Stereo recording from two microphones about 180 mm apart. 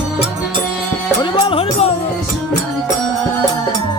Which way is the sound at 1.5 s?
35° left (ahead or behind).